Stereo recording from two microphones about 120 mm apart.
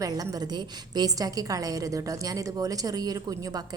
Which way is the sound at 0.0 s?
30° right (ahead or behind).